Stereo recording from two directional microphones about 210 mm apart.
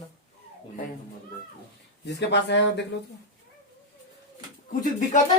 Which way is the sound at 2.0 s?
55° left (ahead or behind).